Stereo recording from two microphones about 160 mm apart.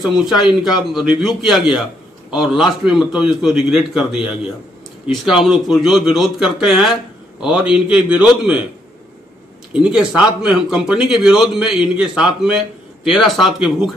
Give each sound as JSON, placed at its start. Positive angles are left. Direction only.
{"t": 0.0, "sound": "a man's voice", "side_deg": -5}
{"t": 9.8, "sound": "a man's voice", "side_deg": -5}